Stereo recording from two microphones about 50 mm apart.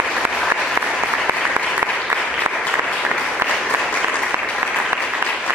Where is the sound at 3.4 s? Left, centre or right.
Right.